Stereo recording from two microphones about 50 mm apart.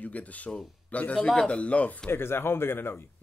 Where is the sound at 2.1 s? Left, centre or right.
Left.